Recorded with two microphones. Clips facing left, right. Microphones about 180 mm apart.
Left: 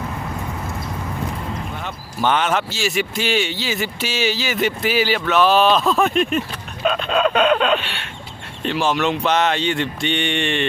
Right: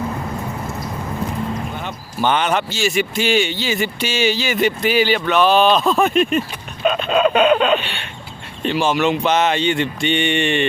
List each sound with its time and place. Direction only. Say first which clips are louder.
1.8 s speech: left 1 dB; centre (ahead or behind)